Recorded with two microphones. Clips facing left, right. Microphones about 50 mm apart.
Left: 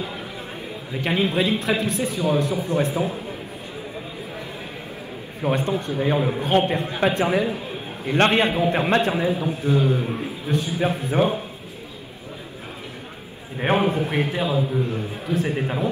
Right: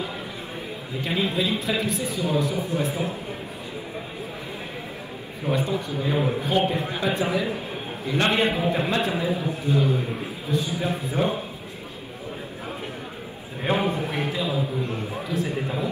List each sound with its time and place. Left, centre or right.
1.0 s a man's voice: left
5.4 s a man's voice: left
6.1 s a man's voice: centre
6.4 s a man's voice: left
13.7 s a man's voice: left